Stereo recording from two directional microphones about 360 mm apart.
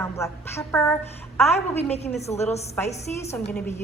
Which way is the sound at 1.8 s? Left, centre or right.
Centre.